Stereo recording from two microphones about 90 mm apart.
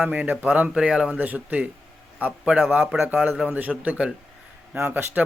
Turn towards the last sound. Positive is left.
turn(degrees=-20)  # may be behind; listen again after turning